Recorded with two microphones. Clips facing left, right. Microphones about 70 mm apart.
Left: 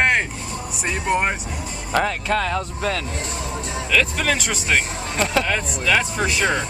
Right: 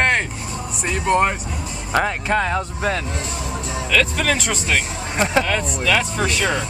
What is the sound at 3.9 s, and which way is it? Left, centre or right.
Speech, centre.